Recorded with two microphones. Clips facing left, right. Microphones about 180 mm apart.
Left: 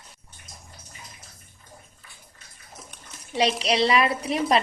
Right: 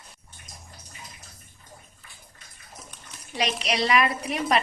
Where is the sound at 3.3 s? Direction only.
30° left (ahead or behind).